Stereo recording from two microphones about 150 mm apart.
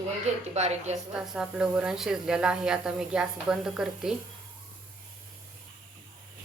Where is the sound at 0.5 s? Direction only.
50° right (ahead or behind).